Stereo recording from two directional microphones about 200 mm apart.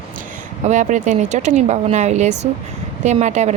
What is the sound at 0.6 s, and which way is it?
Speech, 40° right (ahead or behind).